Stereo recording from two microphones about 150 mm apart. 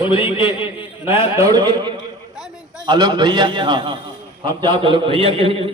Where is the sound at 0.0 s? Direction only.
35° left (ahead or behind).